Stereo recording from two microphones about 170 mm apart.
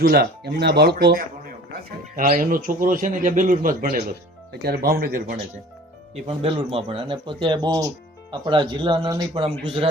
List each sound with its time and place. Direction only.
0.0 s speech: 65° right (ahead or behind)
2.1 s a man's voice: 55° right (ahead or behind)
6.2 s speech: 35° right (ahead or behind)